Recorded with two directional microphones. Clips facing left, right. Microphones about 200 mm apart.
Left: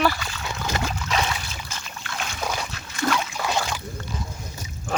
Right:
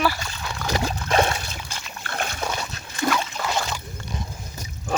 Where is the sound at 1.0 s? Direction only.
50° right (ahead or behind).